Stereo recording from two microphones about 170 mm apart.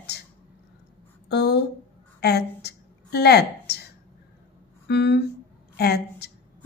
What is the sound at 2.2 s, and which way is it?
A woman's voice, 75° left (ahead or behind).